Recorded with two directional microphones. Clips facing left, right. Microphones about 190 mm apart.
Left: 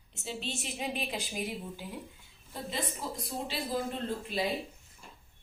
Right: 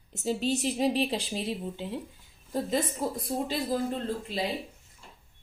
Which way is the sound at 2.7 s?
45° right (ahead or behind).